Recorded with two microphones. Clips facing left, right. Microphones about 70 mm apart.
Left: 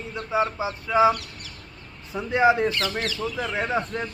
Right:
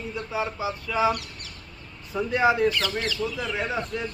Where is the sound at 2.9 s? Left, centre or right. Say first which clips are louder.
Even; left.